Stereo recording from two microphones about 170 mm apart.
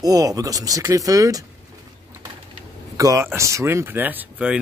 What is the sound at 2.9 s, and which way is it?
Speech, 20° right (ahead or behind).